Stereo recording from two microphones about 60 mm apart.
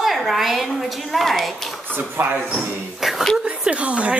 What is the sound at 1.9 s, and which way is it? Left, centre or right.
Speech, right.